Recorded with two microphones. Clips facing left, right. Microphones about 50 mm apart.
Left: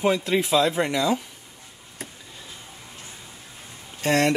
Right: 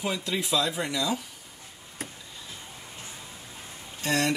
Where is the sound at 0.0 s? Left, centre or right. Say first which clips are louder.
Left 8 dB; left.